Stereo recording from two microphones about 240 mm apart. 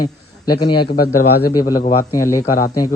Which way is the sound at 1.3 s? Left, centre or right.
Left.